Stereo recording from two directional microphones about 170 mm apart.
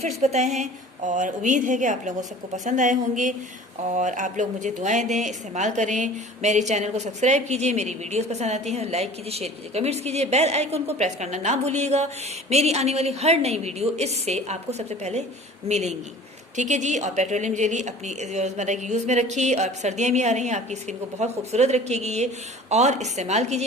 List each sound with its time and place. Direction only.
0.2 s a woman's voice: 40° right (ahead or behind)